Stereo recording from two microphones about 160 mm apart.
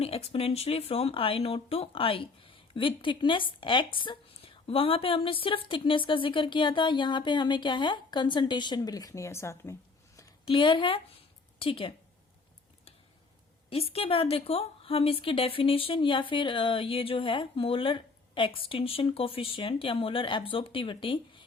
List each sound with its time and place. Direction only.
0.0 s speech: 40° left (ahead or behind); by 9.7 s 15° left (ahead or behind)
10.4 s speech: 30° left (ahead or behind)
13.9 s speech: 35° left (ahead or behind)